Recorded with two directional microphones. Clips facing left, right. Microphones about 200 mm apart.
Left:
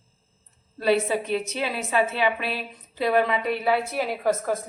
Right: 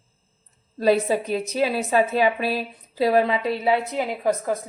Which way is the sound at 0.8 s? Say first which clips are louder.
Right 3 dB; 40° right (ahead or behind).